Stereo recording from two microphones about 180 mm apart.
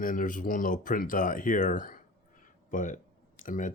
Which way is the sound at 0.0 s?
50° left (ahead or behind).